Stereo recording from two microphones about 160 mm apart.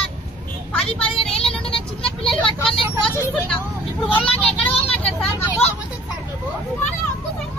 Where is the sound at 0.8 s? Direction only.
35° left (ahead or behind).